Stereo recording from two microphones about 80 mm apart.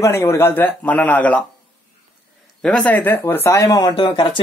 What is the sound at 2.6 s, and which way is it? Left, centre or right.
Speech, centre.